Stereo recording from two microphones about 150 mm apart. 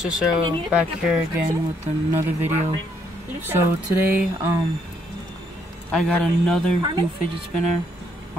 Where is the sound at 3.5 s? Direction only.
15° right (ahead or behind).